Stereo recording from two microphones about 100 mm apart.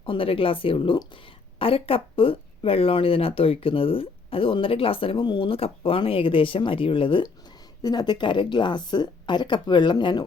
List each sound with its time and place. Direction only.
0.0 s speech: 65° left (ahead or behind)
7.8 s speech: 45° left (ahead or behind)